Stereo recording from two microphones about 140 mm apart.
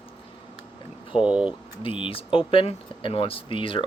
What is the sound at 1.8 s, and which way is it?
Speech, 40° left (ahead or behind).